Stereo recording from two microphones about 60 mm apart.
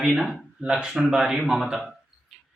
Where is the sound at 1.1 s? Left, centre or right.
Centre.